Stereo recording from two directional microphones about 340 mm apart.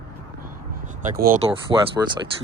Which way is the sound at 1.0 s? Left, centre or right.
Right.